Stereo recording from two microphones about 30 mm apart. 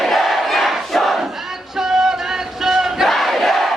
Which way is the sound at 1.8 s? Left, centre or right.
Centre.